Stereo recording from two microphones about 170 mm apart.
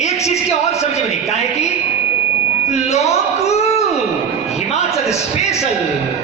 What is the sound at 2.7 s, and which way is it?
Speech, 40° left (ahead or behind).